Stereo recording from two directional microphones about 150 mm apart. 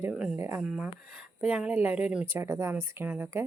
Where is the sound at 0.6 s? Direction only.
5° right (ahead or behind).